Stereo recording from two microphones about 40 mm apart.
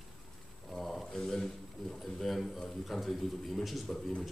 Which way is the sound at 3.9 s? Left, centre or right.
Left.